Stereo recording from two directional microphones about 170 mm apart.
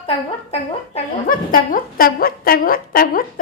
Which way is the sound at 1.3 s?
55° left (ahead or behind).